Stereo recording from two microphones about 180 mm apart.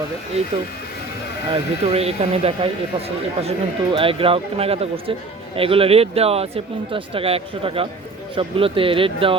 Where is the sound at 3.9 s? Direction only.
30° right (ahead or behind).